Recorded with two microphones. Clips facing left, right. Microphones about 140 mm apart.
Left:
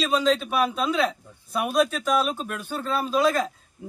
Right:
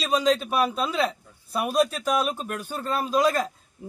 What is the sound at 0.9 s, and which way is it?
Speech, 5° right (ahead or behind).